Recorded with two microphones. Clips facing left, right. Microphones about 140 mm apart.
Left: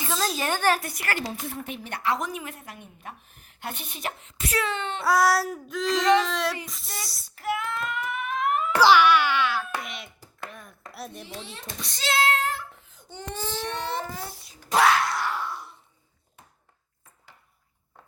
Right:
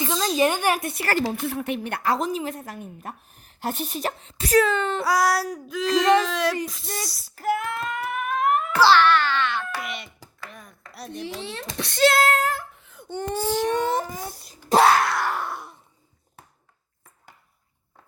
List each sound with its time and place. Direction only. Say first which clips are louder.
0.1 s a sound: right 2 dB; 5° left (ahead or behind)
0.3 s speech: right 4 dB; 15° right (ahead or behind)
1.5 s speech: right 7 dB; 70° right (ahead or behind)
2.0 s a woman's voice: right 2 dB; 35° right (ahead or behind)
5.0 s a sound: left 3 dB; centre (ahead or behind)
7.3 s child singing: right 4 dB; 45° right (ahead or behind)
8.7 s wail: even; 15° left (ahead or behind)
9.8 s a sound: right 5 dB; centre (ahead or behind)
10.5 s chopping: even; centre (ahead or behind)
11.3 s speech: right 6 dB; 70° right (ahead or behind); by 12.6 s 45° right (ahead or behind)
12.8 s baby cry: right 9 dB; 60° right (ahead or behind)
13.7 s wail: right 7 dB; 45° right (ahead or behind)
14.4 s a child's voice: right 4 dB; 35° right (ahead or behind)
15.0 s a sound: right 3 dB; 60° right (ahead or behind)